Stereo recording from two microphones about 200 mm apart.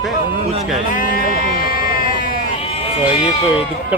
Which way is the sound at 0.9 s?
45° left (ahead or behind).